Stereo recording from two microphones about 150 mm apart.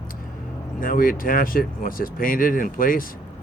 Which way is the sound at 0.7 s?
70° left (ahead or behind).